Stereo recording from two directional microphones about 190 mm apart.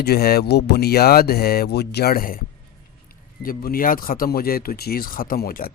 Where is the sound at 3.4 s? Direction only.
50° left (ahead or behind).